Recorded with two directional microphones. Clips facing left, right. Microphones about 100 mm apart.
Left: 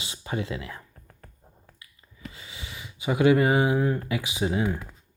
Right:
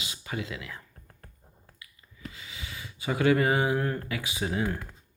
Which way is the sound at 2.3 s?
25° left (ahead or behind).